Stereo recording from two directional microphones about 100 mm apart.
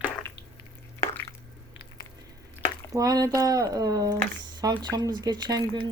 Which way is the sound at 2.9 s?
40° right (ahead or behind).